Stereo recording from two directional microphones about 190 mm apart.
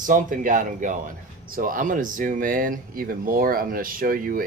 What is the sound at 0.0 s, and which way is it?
Speech, 45° right (ahead or behind).